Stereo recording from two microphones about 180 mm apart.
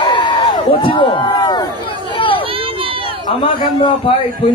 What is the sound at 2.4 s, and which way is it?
Run, 30° right (ahead or behind).